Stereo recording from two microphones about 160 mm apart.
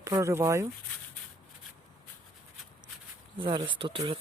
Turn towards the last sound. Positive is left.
turn(degrees=-30)  # may be behind; listen again after turning